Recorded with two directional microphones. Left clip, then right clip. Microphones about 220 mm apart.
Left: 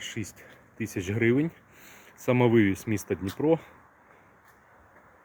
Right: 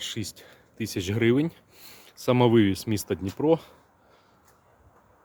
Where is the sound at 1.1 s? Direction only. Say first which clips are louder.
Right 2 dB; 10° right (ahead or behind).